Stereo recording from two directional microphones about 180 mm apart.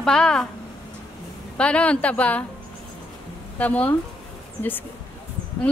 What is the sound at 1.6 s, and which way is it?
Speech, 5° left (ahead or behind).